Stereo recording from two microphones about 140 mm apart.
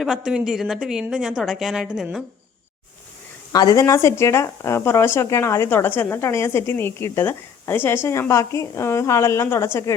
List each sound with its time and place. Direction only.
0.0 s speech: 5° right (ahead or behind)
3.5 s speech: 30° left (ahead or behind)